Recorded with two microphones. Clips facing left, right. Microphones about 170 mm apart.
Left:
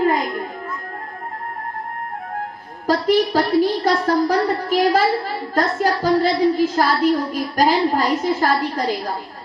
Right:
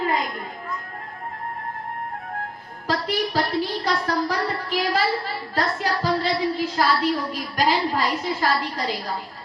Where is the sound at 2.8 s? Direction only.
45° left (ahead or behind).